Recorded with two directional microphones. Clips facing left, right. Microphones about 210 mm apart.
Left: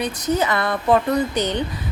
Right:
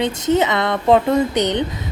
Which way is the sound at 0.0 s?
25° right (ahead or behind).